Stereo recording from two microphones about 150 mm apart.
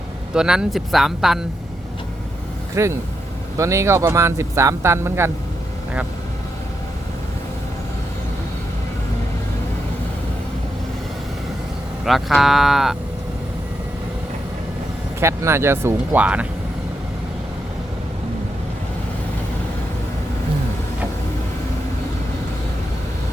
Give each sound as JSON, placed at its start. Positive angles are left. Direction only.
{"t": 0.3, "sound": "speech", "side_deg": -5}
{"t": 2.7, "sound": "speech", "side_deg": -20}
{"t": 12.0, "sound": "speech", "side_deg": 0}
{"t": 15.2, "sound": "speech", "side_deg": -20}